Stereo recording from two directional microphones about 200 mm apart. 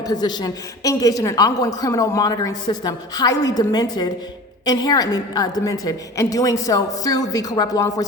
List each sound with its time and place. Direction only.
0.0 s a woman's voice: 20° left (ahead or behind)